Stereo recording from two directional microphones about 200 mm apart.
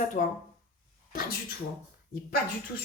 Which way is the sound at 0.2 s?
40° left (ahead or behind).